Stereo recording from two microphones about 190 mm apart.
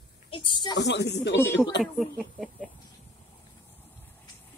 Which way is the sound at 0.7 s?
65° left (ahead or behind).